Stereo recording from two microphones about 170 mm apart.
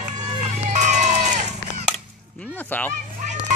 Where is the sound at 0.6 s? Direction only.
45° right (ahead or behind).